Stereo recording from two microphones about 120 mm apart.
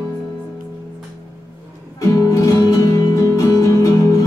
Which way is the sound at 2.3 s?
25° left (ahead or behind).